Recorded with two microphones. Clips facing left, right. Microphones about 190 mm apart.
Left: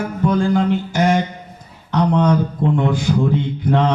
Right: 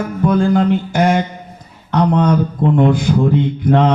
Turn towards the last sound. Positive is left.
turn(degrees=-55)  # may be behind; listen again after turning